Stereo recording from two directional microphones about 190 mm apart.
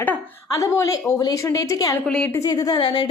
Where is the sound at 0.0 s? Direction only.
15° left (ahead or behind).